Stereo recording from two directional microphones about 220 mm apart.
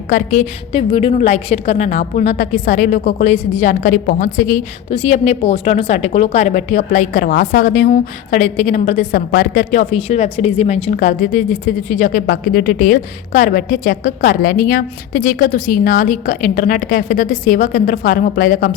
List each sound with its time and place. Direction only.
0.1 s a woman's voice: 35° left (ahead or behind)
0.7 s a woman's voice: 25° left (ahead or behind); by 18.7 s 40° left (ahead or behind)